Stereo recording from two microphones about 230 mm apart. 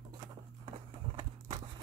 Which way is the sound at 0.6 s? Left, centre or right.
Right.